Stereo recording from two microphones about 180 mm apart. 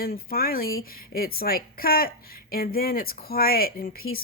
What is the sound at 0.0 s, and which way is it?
A woman's voice, 55° left (ahead or behind).